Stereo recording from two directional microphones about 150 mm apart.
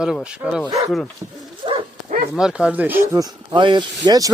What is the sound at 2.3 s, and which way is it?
Speech, 5° right (ahead or behind).